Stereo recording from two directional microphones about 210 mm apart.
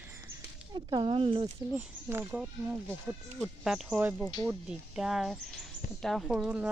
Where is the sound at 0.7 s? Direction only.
20° right (ahead or behind).